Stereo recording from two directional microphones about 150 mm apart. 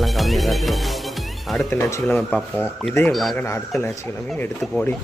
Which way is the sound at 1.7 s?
15° left (ahead or behind).